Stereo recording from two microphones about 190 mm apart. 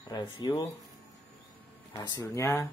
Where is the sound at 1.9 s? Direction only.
20° left (ahead or behind).